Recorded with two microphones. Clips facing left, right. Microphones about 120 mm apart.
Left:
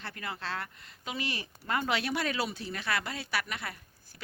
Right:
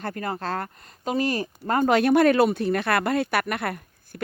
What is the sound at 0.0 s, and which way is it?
Speech, 45° right (ahead or behind).